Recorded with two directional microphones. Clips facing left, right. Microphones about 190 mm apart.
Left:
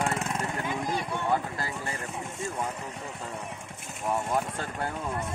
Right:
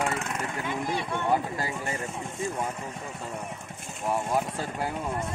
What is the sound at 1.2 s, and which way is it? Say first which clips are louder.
Speech: right 4 dB; 15° right (ahead or behind).